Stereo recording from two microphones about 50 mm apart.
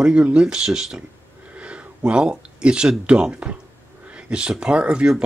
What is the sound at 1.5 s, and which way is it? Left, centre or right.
Speech, right.